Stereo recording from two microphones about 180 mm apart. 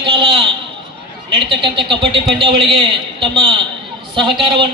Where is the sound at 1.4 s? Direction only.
30° right (ahead or behind).